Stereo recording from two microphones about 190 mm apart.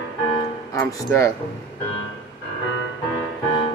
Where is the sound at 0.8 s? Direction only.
15° left (ahead or behind).